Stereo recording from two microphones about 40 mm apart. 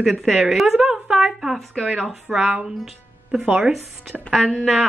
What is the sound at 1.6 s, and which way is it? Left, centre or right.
Speech, centre.